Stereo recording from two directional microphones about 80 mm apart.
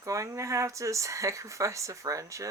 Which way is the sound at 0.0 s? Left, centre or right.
Right.